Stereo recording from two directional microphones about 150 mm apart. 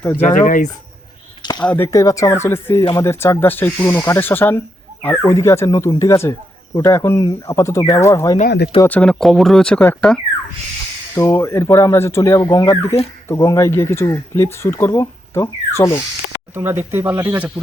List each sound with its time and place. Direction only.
0.4 s speech: 65° left (ahead or behind)
1.4 s a sound: 30° left (ahead or behind)
1.6 s speech: 15° left (ahead or behind)
8.4 s speech: 90° left
8.8 s speech: 10° left (ahead or behind)
11.1 s speech: 20° left (ahead or behind)
16.6 s speech: 15° right (ahead or behind)